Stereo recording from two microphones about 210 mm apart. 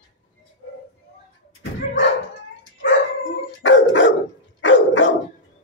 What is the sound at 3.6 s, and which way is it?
Dog, 60° left (ahead or behind).